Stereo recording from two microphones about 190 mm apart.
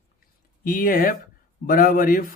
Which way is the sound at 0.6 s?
45° left (ahead or behind).